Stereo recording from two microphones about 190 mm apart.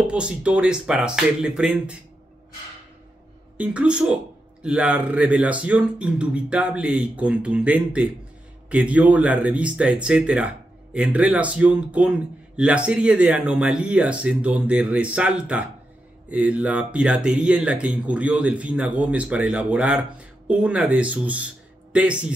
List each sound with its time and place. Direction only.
0.0 s speech: 5° right (ahead or behind)
3.5 s speech: 5° right (ahead or behind)